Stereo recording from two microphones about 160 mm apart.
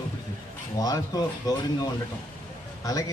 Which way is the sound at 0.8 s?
25° left (ahead or behind).